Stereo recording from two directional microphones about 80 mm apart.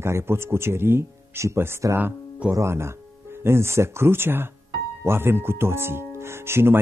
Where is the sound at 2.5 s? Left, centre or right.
Right.